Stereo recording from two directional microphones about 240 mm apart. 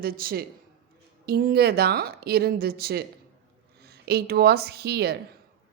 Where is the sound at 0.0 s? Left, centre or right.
Right.